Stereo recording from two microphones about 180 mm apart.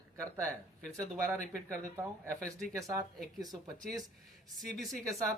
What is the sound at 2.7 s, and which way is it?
Speech, 20° right (ahead or behind).